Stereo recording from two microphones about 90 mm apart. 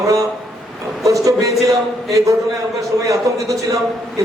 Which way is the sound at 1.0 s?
40° right (ahead or behind).